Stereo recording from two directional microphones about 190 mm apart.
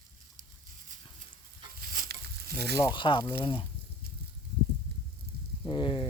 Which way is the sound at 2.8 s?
25° left (ahead or behind).